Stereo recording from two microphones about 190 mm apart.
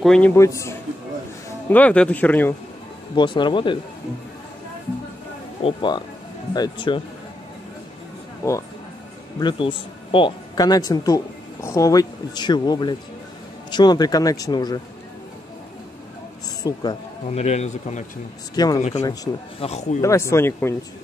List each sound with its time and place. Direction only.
0.0 s a man's voice: 5° left (ahead or behind)
0.4 s speech: 15° left (ahead or behind)
3.2 s speech: 25° left (ahead or behind)
5.6 s speech: 30° left (ahead or behind)
8.4 s speech: 15° left (ahead or behind)
16.6 s speech: 20° left (ahead or behind)
17.3 s speech: 35° left (ahead or behind)
18.5 s speech: 20° left (ahead or behind)
18.8 s speech: 35° left (ahead or behind)
19.3 s speech: 15° left (ahead or behind)
19.6 s speech: 35° left (ahead or behind)
20.0 s speech: 15° left (ahead or behind)